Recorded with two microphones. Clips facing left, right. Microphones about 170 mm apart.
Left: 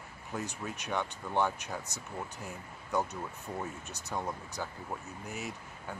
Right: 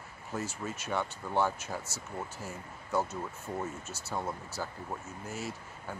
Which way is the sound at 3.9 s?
15° left (ahead or behind).